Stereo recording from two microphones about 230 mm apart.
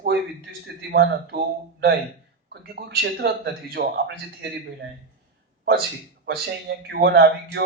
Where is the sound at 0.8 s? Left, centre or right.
Right.